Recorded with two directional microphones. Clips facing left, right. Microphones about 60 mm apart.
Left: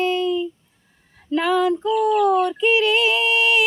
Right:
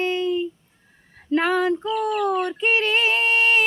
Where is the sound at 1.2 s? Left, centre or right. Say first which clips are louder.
Left 1 dB; right.